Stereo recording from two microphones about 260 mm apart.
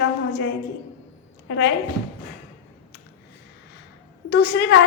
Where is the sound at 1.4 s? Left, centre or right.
Left.